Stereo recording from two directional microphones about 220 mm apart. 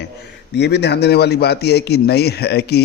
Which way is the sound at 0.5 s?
50° left (ahead or behind).